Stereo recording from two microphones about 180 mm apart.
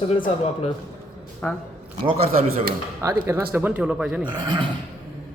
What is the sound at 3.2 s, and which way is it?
Speech, 15° right (ahead or behind).